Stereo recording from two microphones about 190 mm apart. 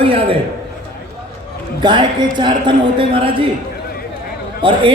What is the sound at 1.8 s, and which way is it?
A man's voice, 25° right (ahead or behind).